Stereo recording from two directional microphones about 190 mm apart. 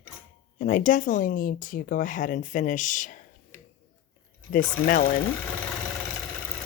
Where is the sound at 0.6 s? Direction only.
45° left (ahead or behind).